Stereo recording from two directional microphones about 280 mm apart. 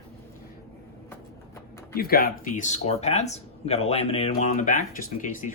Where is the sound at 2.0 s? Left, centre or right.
Left.